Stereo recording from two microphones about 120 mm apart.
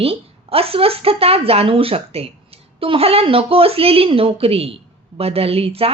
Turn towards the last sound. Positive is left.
turn(degrees=-55)  # may be behind; listen again after turning